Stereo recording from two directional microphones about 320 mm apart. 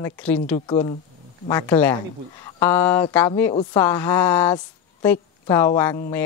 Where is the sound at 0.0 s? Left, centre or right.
Centre.